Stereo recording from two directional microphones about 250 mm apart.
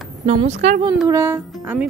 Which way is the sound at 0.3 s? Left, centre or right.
Right.